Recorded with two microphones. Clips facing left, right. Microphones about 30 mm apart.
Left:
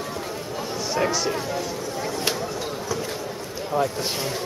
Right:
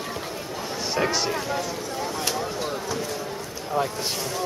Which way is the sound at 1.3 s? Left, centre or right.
Centre.